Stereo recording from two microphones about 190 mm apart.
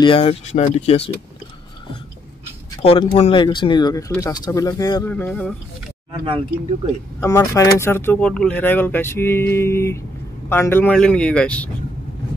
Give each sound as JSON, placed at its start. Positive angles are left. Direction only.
{"t": 0.0, "sound": "speech", "side_deg": 30}
{"t": 2.7, "sound": "speech", "side_deg": 25}
{"t": 5.1, "sound": "speech", "side_deg": 5}
{"t": 7.2, "sound": "speech", "side_deg": 15}